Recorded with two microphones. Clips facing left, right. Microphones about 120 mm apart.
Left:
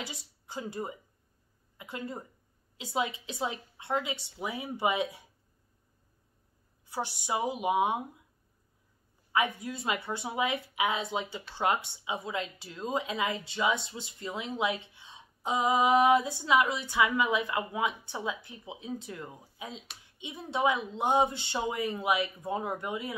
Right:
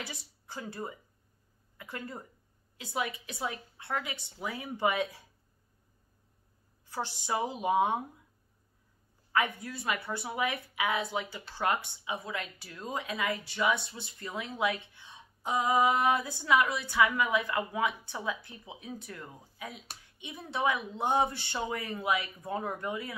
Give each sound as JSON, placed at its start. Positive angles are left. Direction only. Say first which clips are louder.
{"t": 0.5, "sound": "a woman's voice", "louder": "left 3 dB", "side_deg": 15}
{"t": 6.9, "sound": "a woman's voice", "louder": "left 1 dB", "side_deg": 15}
{"t": 9.3, "sound": "a woman's voice", "louder": "left 1 dB", "side_deg": 15}